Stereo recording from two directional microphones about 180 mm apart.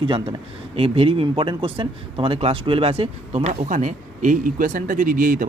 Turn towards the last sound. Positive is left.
turn(degrees=-50)  # may be behind; listen again after turning